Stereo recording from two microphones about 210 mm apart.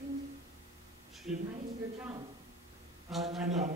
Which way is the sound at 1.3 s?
5° right (ahead or behind).